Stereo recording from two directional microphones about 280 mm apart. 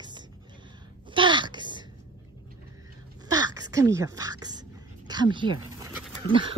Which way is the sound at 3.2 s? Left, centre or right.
Centre.